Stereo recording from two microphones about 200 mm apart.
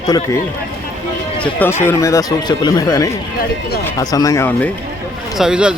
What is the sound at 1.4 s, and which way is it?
Speech, 10° left (ahead or behind).